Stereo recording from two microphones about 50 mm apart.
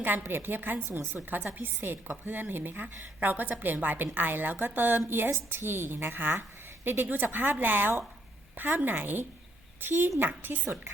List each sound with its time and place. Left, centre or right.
0.0 s a woman's voice: right